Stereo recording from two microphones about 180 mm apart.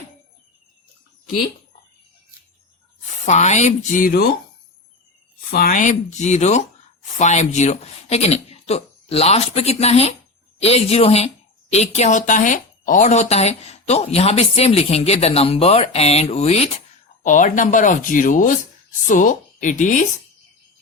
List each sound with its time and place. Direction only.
3.2 s a woman's voice: 40° left (ahead or behind)
5.5 s a woman's voice: 55° left (ahead or behind)